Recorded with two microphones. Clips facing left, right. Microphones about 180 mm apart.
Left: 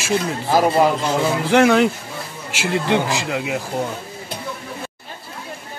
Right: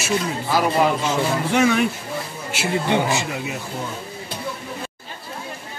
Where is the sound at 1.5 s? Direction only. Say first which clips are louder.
Left 6 dB; 85° left.